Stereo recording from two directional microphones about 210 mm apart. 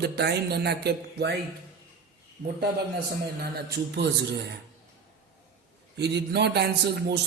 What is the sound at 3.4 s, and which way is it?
Speech, 50° right (ahead or behind).